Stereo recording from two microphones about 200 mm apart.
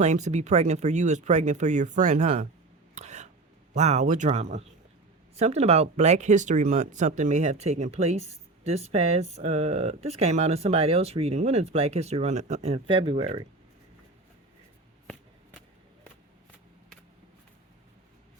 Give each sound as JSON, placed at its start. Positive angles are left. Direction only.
{"t": 0.0, "sound": "speech", "side_deg": -35}
{"t": 2.9, "sound": "a sound", "side_deg": -35}
{"t": 3.8, "sound": "speech", "side_deg": -35}